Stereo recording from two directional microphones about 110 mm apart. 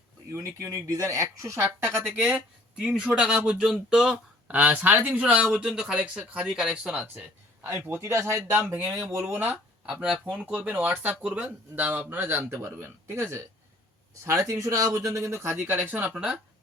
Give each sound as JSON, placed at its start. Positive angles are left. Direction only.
{"t": 0.3, "sound": "speech", "side_deg": -25}
{"t": 2.1, "sound": "speech", "side_deg": -10}
{"t": 4.4, "sound": "speech", "side_deg": -15}
{"t": 9.8, "sound": "speech", "side_deg": -5}
{"t": 14.3, "sound": "speech", "side_deg": -25}